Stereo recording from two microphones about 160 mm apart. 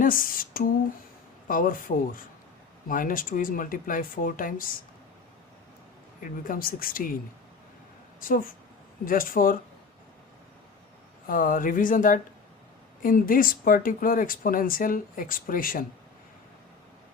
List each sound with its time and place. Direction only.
0.0 s a sound: 60° left (ahead or behind)
1.5 s speech: 60° left (ahead or behind)
6.2 s speech: 60° left (ahead or behind)
8.2 s speech: 60° left (ahead or behind)
11.3 s speech: 60° left (ahead or behind)